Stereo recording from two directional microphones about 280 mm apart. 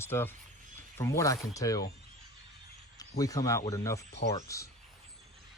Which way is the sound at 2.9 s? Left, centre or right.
Centre.